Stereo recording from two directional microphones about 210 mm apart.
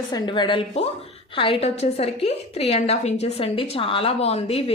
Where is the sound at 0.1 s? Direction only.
20° left (ahead or behind).